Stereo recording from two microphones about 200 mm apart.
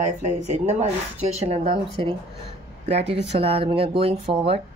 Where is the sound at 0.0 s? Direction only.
35° right (ahead or behind).